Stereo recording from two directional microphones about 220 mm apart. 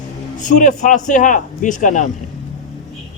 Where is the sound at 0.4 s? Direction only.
35° left (ahead or behind).